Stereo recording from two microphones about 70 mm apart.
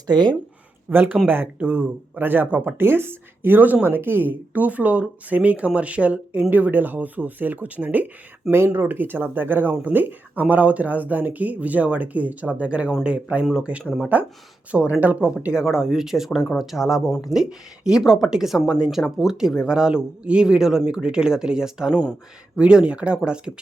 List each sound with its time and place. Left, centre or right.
0.9 s speech: right